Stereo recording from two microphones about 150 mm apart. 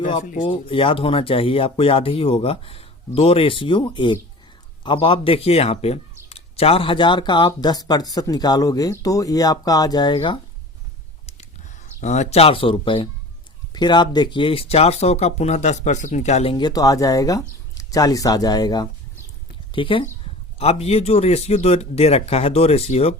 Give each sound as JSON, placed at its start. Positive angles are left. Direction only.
{"t": 0.2, "sound": "speech", "side_deg": 60}
{"t": 0.4, "sound": "speech", "side_deg": 35}
{"t": 11.9, "sound": "speech", "side_deg": 50}